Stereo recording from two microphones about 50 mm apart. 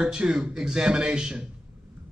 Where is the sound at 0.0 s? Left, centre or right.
Centre.